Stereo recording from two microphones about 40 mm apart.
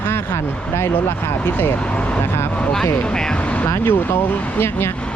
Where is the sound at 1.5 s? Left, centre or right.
Left.